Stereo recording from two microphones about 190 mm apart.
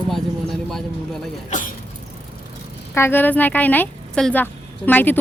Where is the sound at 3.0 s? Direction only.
10° left (ahead or behind).